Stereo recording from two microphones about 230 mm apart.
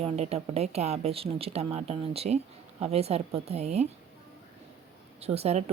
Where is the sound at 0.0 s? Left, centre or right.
Right.